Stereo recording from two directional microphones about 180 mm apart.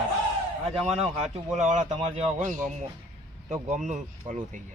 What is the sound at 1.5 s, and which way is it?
Speech, 40° right (ahead or behind).